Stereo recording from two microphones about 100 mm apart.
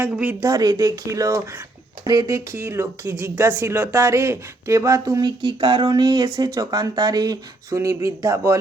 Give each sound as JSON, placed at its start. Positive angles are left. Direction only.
{"t": 0.0, "sound": "speech", "side_deg": -20}
{"t": 0.3, "sound": "speech", "side_deg": -35}
{"t": 5.4, "sound": "speech", "side_deg": -55}